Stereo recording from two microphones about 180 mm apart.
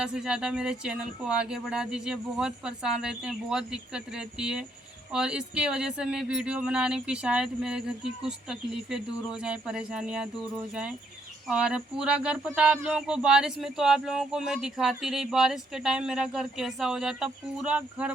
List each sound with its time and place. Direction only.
0.0 s speech: 5° right (ahead or behind)
11.4 s speech: 5° right (ahead or behind)